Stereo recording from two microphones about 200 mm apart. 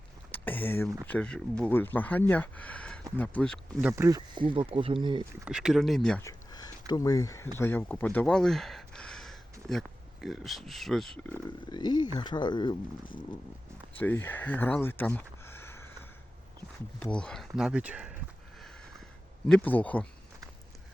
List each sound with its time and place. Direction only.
0.3 s a sound: 10° left (ahead or behind)
1.0 s speech: 5° left (ahead or behind)
3.8 s speech: 15° right (ahead or behind)
5.5 s speech: 5° right (ahead or behind)
6.2 s a sound: 20° left (ahead or behind)
7.6 s speech: 10° left (ahead or behind)
11.7 s speech: 20° left (ahead or behind)
14.0 s speech: 10° left (ahead or behind)
17.0 s speech: 5° left (ahead or behind)
19.5 s speech: 10° left (ahead or behind)